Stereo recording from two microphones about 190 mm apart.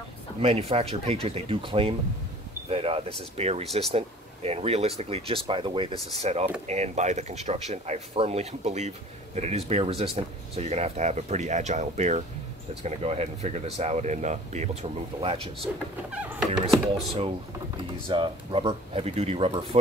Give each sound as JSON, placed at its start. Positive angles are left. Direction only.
{"t": 0.4, "sound": "speech", "side_deg": -30}
{"t": 15.6, "sound": "speech", "side_deg": -5}
{"t": 18.0, "sound": "speech", "side_deg": -25}